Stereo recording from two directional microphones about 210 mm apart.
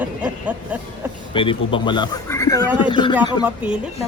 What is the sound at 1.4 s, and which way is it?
A man's voice, 25° left (ahead or behind).